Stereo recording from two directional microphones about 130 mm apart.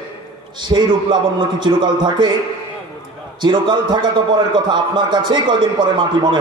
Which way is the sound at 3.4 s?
40° right (ahead or behind).